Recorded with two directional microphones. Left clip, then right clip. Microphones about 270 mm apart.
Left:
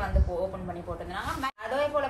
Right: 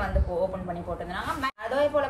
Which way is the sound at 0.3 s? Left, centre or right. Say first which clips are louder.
Right 3 dB; centre.